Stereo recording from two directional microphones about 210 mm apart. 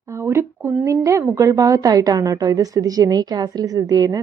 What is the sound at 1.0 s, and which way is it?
A woman's voice, 15° right (ahead or behind).